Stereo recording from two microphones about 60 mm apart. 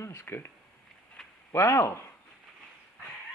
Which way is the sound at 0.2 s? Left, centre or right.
Left.